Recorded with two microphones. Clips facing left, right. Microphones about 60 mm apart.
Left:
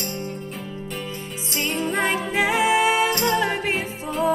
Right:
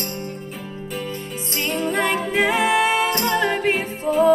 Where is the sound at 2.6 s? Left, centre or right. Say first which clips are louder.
Even; right.